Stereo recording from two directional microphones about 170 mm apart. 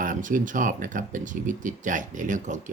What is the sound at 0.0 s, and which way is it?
Speech, 50° right (ahead or behind).